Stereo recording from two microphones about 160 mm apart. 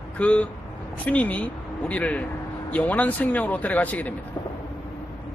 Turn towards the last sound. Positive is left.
turn(degrees=10)  # may be behind; listen again after turning